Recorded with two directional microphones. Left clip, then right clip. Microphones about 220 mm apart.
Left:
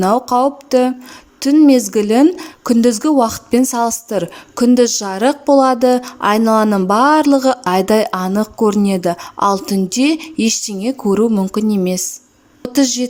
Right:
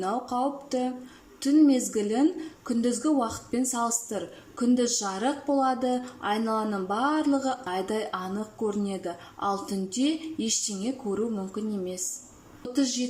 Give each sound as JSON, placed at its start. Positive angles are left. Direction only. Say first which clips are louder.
{"t": 0.0, "sound": "a woman's voice", "louder": "left 15 dB", "side_deg": 40}